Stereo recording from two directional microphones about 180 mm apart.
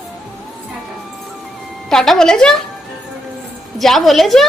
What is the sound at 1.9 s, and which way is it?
Speech, 5° left (ahead or behind).